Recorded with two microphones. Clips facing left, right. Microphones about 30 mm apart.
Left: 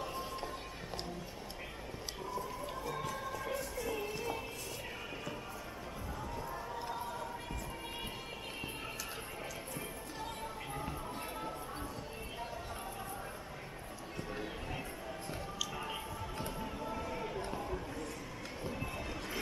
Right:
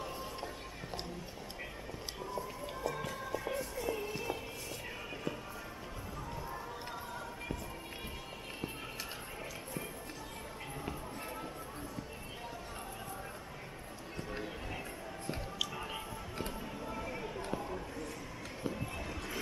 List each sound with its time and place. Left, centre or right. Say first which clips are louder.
3.4 s music: right 2 dB; centre
15.7 s music: left 1 dB; centre
16.8 s a sound: left 1 dB; centre